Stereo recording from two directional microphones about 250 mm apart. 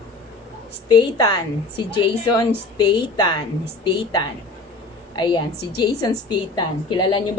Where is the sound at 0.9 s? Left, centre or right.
Centre.